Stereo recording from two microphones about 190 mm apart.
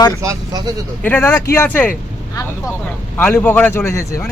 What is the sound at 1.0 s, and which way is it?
Speech, 10° left (ahead or behind).